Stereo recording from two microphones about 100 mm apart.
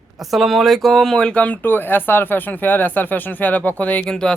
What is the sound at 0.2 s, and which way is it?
Speech, centre (ahead or behind).